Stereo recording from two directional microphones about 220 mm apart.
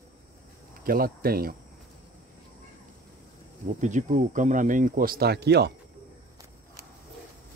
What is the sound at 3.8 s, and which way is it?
Speech, 35° right (ahead or behind).